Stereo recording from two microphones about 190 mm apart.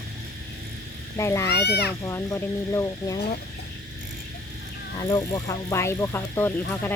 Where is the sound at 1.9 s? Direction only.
15° left (ahead or behind).